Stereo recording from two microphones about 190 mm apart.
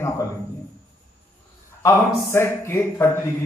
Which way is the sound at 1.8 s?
15° left (ahead or behind).